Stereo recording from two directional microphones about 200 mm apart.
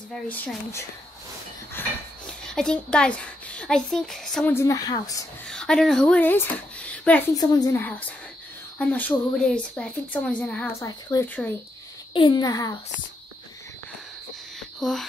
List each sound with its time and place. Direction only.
0.1 s speech: 5° left (ahead or behind)
1.8 s dishes: 10° left (ahead or behind)
2.4 s speech: 5° left (ahead or behind)
5.5 s speech: 5° left (ahead or behind)
7.3 s speech: 20° left (ahead or behind)
12.1 s a child's voice: 25° left (ahead or behind)
14.8 s speech: centre (ahead or behind)